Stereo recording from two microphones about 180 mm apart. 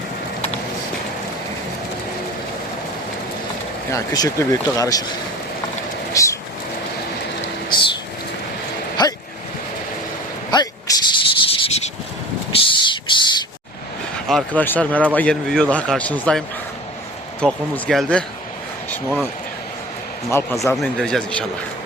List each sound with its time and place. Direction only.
3.9 s speech: 20° left (ahead or behind)
6.2 s vehicle: 20° left (ahead or behind)
9.0 s a sound: 25° left (ahead or behind)
10.5 s a sound: 20° left (ahead or behind)
14.3 s speech: 5° left (ahead or behind)
17.4 s speech: 5° left (ahead or behind)
20.3 s speech: 15° left (ahead or behind)
20.8 s speech: 5° left (ahead or behind)